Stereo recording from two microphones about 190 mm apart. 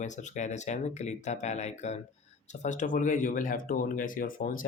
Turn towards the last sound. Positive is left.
turn(degrees=45)  # may be behind; listen again after turning